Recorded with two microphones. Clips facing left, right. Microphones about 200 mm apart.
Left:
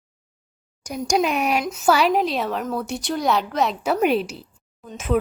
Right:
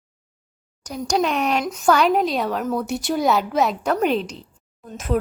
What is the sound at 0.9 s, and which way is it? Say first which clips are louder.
A woman's voice: even; 10° left (ahead or behind).